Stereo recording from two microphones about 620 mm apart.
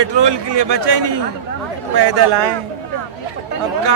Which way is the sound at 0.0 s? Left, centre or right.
Right.